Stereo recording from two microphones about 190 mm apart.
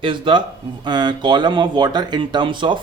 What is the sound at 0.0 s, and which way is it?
A man's voice, 25° right (ahead or behind).